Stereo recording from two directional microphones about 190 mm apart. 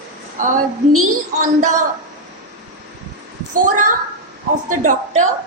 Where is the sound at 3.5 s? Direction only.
45° right (ahead or behind).